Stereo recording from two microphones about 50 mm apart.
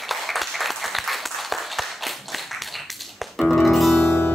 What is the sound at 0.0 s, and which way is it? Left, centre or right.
Applause, centre.